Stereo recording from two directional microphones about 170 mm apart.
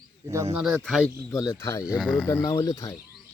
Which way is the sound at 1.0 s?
20° left (ahead or behind).